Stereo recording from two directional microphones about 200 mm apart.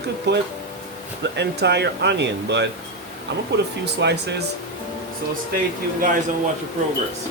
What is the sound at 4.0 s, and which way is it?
Speech, 60° right (ahead or behind).